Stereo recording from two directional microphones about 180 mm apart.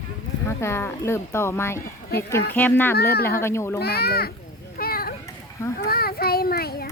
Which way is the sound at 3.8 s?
60° left (ahead or behind).